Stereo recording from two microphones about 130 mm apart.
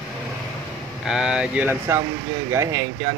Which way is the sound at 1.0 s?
5° right (ahead or behind).